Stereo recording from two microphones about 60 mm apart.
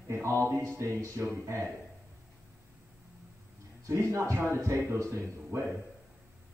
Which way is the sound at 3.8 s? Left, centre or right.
Right.